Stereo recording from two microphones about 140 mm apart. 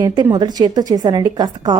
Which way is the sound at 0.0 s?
30° right (ahead or behind).